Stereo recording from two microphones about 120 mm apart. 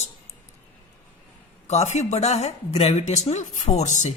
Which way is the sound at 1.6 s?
70° left (ahead or behind).